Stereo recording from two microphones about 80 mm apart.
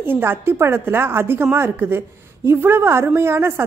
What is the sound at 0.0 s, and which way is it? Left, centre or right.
A woman's voice, right.